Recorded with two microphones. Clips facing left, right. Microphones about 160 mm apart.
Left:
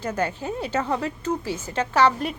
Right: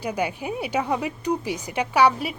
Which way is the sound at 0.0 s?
10° right (ahead or behind).